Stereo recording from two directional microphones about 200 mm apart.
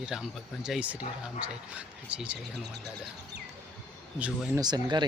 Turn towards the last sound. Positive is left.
turn(degrees=-20)  # may be behind; listen again after turning